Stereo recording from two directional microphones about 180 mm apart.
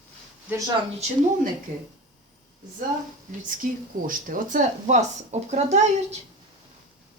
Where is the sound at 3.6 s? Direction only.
50° right (ahead or behind).